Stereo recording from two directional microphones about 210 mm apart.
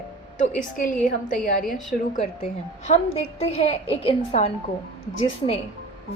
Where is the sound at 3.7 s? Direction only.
25° left (ahead or behind).